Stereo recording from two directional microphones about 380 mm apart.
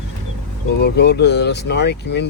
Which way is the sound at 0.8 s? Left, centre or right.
Left.